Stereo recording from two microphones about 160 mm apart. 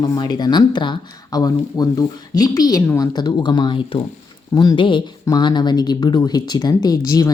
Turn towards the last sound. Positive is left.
turn(degrees=25)  # may be behind; listen again after turning